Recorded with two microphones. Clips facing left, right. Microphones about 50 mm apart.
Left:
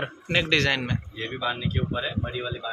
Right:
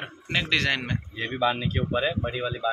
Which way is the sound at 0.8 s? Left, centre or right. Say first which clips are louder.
Even; right.